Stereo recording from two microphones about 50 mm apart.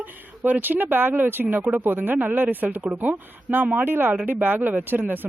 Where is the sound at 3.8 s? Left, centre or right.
Right.